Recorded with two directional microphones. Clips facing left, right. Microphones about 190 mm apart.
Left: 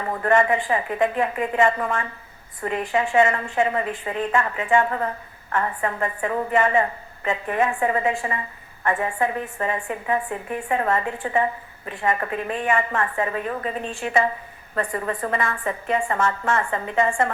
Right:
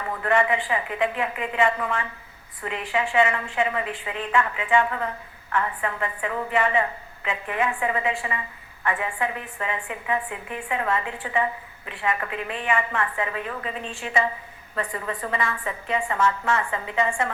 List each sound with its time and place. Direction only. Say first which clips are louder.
0.1 s a woman's voice: left 3 dB; 45° left (ahead or behind)